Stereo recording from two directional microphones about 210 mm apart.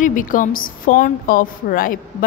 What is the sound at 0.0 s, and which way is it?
A woman's voice, 40° left (ahead or behind).